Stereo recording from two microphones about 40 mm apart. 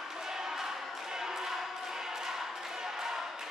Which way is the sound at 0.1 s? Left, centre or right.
Centre.